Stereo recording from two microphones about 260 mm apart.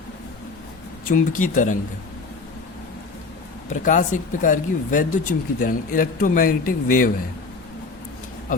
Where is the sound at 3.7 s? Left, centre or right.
Left.